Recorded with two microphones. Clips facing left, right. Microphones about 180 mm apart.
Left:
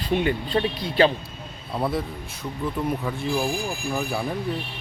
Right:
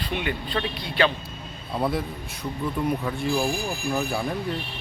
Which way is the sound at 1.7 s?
Centre (ahead or behind).